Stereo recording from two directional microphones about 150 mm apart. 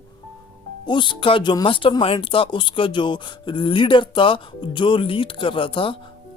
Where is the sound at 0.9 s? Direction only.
30° left (ahead or behind).